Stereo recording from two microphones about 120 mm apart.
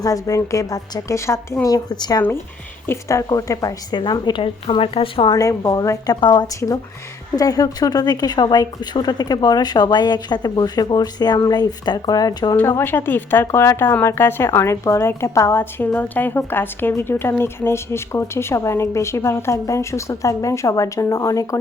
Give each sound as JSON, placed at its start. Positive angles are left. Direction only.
{"t": 0.0, "sound": "speech", "side_deg": 30}
{"t": 2.8, "sound": "speech", "side_deg": 25}
{"t": 5.3, "sound": "speech", "side_deg": 30}
{"t": 12.5, "sound": "speech", "side_deg": 15}